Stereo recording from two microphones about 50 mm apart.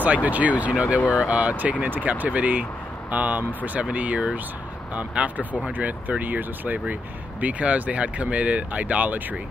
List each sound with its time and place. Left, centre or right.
0.0 s speech: right